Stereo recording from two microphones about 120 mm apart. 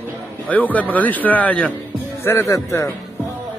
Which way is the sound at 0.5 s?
15° left (ahead or behind).